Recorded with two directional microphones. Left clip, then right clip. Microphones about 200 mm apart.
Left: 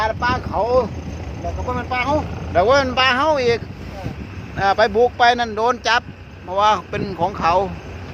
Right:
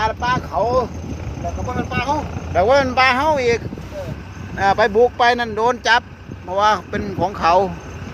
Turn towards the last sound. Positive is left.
turn(degrees=-25)  # may be behind; listen again after turning